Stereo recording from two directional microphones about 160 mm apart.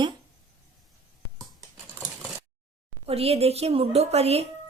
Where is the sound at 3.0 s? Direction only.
40° right (ahead or behind).